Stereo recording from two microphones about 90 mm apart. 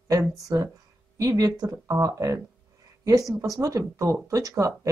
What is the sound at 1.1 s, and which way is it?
Speech, 40° right (ahead or behind).